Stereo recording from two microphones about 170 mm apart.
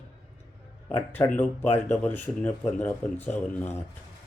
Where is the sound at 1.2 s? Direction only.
20° left (ahead or behind).